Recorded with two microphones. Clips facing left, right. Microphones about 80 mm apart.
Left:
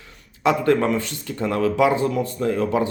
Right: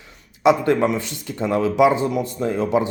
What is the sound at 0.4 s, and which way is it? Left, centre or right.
Speech, centre.